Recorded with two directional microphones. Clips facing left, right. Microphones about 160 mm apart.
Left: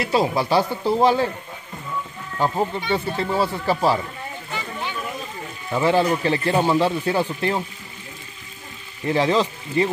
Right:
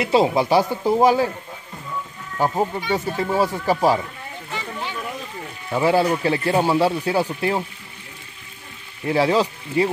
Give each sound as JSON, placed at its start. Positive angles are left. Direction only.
{"t": 0.0, "sound": "speech", "side_deg": -25}
{"t": 2.3, "sound": "speech", "side_deg": -10}
{"t": 5.7, "sound": "speech", "side_deg": -10}
{"t": 9.0, "sound": "speech", "side_deg": -10}